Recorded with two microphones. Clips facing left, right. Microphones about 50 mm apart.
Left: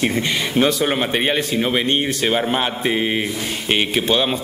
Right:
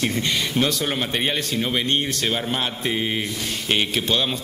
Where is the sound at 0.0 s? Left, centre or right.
Centre.